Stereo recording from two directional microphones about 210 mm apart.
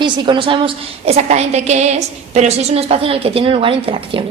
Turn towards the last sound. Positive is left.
turn(degrees=-25)  # may be behind; listen again after turning